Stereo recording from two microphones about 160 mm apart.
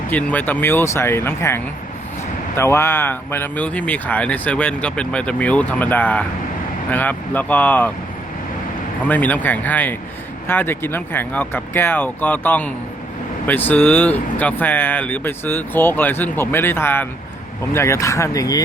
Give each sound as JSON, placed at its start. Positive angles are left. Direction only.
{"t": 0.1, "sound": "speech", "side_deg": 10}
{"t": 9.0, "sound": "speech", "side_deg": 10}